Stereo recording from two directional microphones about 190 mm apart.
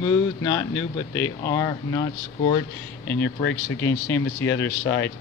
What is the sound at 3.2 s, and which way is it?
Speech, 80° left.